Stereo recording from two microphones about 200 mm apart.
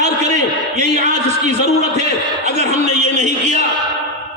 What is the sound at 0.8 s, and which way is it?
Speech, 35° right (ahead or behind).